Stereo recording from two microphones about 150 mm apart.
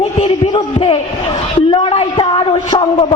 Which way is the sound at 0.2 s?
40° left (ahead or behind).